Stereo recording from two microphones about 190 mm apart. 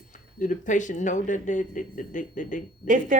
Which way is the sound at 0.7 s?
40° left (ahead or behind).